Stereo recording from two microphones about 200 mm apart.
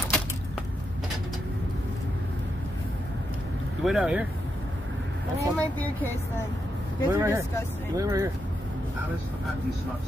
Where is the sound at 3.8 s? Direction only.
5° right (ahead or behind).